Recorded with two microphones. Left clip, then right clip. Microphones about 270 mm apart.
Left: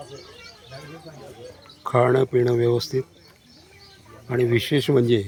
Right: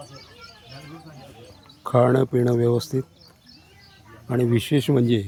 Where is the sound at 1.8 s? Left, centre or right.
Centre.